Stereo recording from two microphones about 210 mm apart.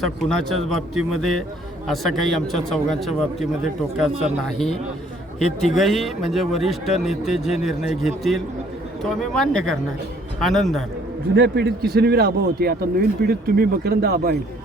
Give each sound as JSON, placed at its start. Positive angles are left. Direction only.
{"t": 0.0, "sound": "a man's voice", "side_deg": 5}
{"t": 3.9, "sound": "a man's voice", "side_deg": 0}
{"t": 11.3, "sound": "speech", "side_deg": -55}